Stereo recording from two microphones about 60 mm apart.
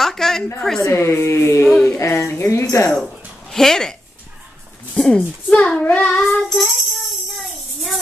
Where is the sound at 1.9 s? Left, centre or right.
Left.